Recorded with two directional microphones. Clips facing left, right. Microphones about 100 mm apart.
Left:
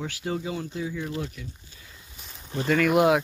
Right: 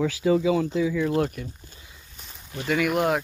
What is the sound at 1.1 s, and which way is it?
Speech, 50° right (ahead or behind).